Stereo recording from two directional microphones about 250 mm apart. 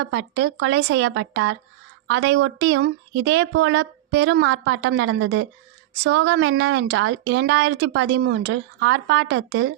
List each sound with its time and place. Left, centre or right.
0.0 s a woman's voice: right